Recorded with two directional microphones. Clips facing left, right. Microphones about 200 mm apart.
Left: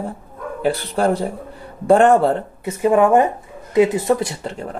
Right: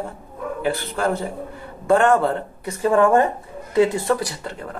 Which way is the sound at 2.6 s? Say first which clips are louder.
Left 2 dB; 20° left (ahead or behind).